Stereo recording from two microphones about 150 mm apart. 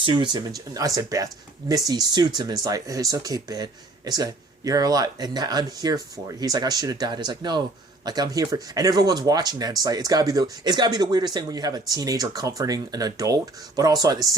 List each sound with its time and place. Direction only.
0.0 s speech: 30° right (ahead or behind)